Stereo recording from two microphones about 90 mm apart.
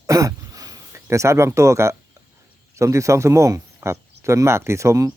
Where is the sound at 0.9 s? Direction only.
30° right (ahead or behind).